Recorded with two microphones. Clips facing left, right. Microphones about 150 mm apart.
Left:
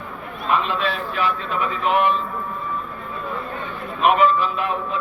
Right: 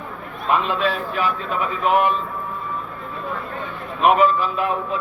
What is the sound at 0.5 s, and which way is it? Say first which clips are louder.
Speech: right 2 dB; 10° right (ahead or behind).